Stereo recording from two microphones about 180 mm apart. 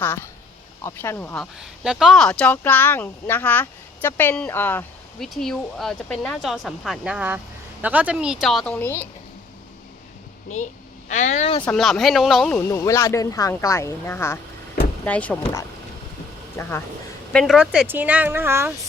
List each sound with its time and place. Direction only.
0.0 s speech: 10° left (ahead or behind)
1.5 s speech: 5° right (ahead or behind); by 9.0 s 10° left (ahead or behind)
11.1 s speech: 40° left (ahead or behind)
11.6 s speech: 5° left (ahead or behind)
12.5 s speech: 15° left (ahead or behind)
16.6 s speech: 15° left (ahead or behind)
17.3 s a woman's voice: centre (ahead or behind)